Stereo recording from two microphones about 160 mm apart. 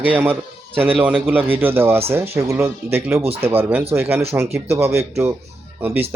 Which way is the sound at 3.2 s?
35° right (ahead or behind).